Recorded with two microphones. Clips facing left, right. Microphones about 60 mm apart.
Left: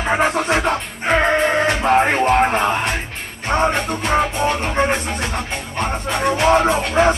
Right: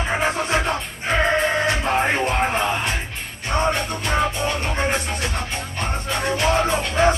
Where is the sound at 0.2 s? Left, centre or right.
Left.